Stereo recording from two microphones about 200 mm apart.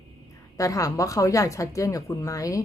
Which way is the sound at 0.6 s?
15° left (ahead or behind).